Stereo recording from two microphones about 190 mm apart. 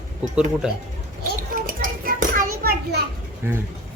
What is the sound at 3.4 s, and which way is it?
Speech, 15° right (ahead or behind).